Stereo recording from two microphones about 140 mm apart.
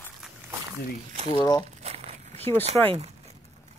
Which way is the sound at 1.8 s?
50° right (ahead or behind).